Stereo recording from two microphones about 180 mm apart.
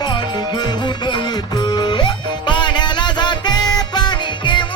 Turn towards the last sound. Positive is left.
turn(degrees=25)  # may be behind; listen again after turning